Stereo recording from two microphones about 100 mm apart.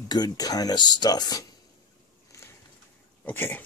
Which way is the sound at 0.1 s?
40° left (ahead or behind).